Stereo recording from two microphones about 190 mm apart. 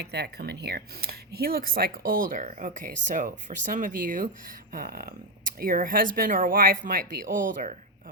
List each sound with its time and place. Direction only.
0.0 s speech: 60° right (ahead or behind); by 7.8 s 40° right (ahead or behind)